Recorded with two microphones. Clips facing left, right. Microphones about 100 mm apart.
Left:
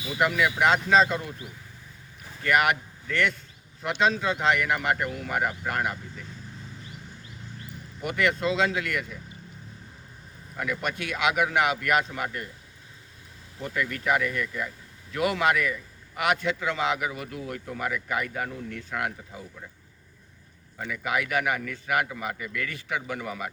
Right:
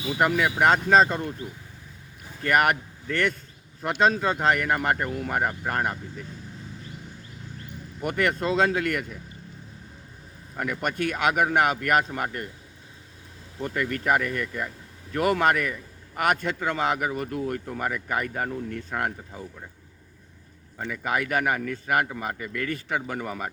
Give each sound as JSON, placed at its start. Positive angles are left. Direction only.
{"t": 0.2, "sound": "a man's voice", "side_deg": -40}
{"t": 8.0, "sound": "a man's voice", "side_deg": -45}
{"t": 10.6, "sound": "a man's voice", "side_deg": -45}
{"t": 13.6, "sound": "a man's voice", "side_deg": -45}
{"t": 20.7, "sound": "a man's voice", "side_deg": -35}